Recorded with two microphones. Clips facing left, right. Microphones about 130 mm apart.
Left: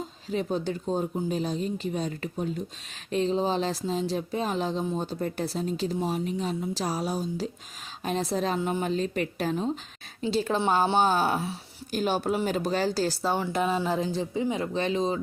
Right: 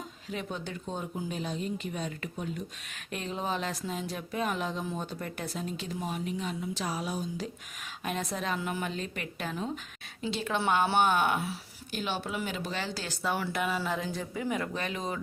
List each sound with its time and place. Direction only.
0.0 s speech: 35° left (ahead or behind)